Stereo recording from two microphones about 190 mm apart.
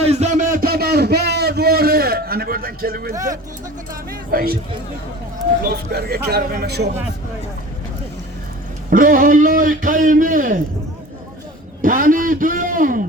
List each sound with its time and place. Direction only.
0.0 s a sound: 35° right (ahead or behind); by 3.2 s 55° right (ahead or behind)
4.1 s a man's voice: 50° right (ahead or behind)
5.6 s a man's voice: 55° right (ahead or behind)
8.9 s a man's voice: 50° right (ahead or behind)
11.8 s a man's voice: 45° right (ahead or behind)